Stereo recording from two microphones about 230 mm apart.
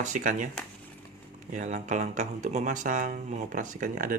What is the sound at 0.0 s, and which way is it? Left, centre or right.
Speech, right.